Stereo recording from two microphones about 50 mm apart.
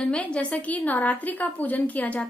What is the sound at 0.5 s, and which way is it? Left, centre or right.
A woman's voice, left.